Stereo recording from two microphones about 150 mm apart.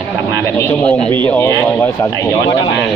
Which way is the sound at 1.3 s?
20° left (ahead or behind).